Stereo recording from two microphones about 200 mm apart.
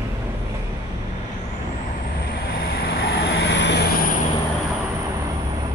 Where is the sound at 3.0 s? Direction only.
65° left (ahead or behind).